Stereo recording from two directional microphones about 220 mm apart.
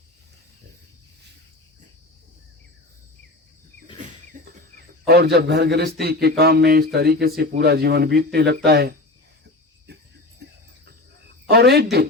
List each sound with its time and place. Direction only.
4.4 s bird: 35° right (ahead or behind)
5.0 s a man's voice: 45° right (ahead or behind)
10.4 s a sound: 50° right (ahead or behind)
11.4 s a man's voice: 45° right (ahead or behind)